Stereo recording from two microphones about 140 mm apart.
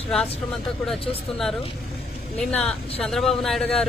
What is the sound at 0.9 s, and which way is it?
Speech, 45° left (ahead or behind).